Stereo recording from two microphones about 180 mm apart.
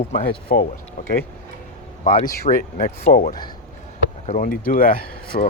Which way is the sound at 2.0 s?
30° left (ahead or behind).